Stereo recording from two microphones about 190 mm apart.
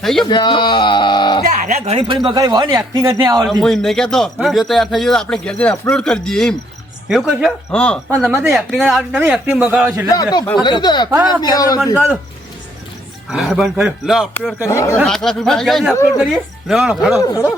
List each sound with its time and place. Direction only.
0.0 s a man's voice: centre (ahead or behind)
0.3 s speech: 25° left (ahead or behind)
1.5 s speech: 40° right (ahead or behind); by 3.4 s 20° right (ahead or behind)
3.5 s a man's voice: centre (ahead or behind)
8.1 s a man's voice: 10° right (ahead or behind)
10.6 s speech: 20° left (ahead or behind)
11.9 s a man's voice: 5° right (ahead or behind)
13.3 s a man's voice: centre (ahead or behind)
14.7 s speech: 15° left (ahead or behind)
15.0 s a man's voice: 5° left (ahead or behind)
17.2 s speech: 15° left (ahead or behind)